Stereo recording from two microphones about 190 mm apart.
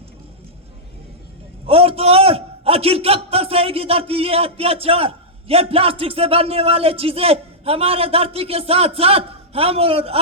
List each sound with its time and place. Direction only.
1.6 s a man's voice: 30° right (ahead or behind)